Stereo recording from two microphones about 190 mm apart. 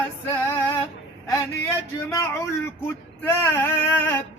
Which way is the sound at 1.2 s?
15° left (ahead or behind).